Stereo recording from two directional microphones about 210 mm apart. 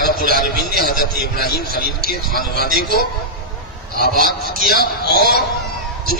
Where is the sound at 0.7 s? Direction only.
45° left (ahead or behind).